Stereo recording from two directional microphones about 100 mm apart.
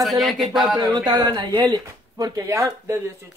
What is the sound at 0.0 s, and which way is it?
Speech, centre (ahead or behind).